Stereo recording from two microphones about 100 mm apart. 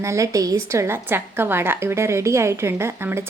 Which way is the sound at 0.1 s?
30° right (ahead or behind).